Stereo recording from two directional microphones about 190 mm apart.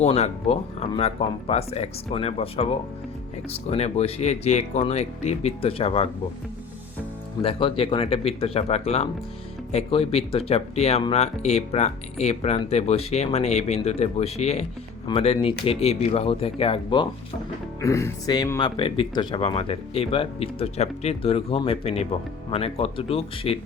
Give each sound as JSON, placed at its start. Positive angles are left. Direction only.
{"t": 0.0, "sound": "speech", "side_deg": 35}
{"t": 7.4, "sound": "speech", "side_deg": 30}
{"t": 17.7, "sound": "speech", "side_deg": 15}
{"t": 18.8, "sound": "speech", "side_deg": 30}